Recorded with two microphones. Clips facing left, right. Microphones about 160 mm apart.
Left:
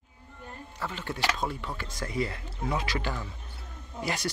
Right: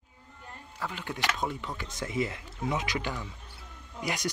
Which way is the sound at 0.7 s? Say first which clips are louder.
Left 1 dB; 10° right (ahead or behind).